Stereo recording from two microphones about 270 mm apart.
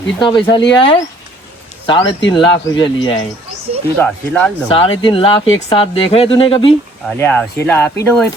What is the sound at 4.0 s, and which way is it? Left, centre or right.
Speech, centre.